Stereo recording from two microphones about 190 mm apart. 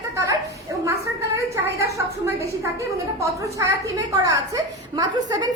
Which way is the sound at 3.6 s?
15° right (ahead or behind).